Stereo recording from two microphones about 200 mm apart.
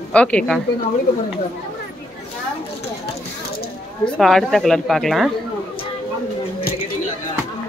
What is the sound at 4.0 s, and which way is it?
Speech, centre (ahead or behind).